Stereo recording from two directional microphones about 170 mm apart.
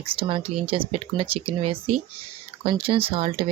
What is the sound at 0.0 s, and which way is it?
Speech, 30° right (ahead or behind).